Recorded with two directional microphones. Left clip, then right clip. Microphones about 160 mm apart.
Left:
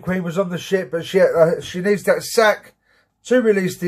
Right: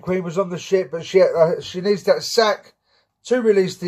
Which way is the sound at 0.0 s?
5° right (ahead or behind).